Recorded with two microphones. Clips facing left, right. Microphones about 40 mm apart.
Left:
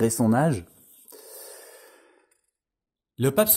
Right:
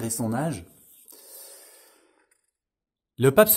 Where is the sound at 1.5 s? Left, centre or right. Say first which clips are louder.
Left 7 dB; left.